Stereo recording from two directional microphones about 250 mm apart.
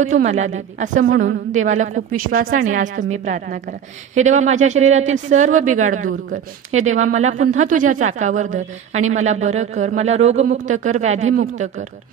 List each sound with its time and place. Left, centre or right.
0.1 s a woman's voice: right